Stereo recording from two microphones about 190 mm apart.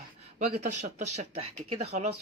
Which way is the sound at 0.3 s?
40° right (ahead or behind).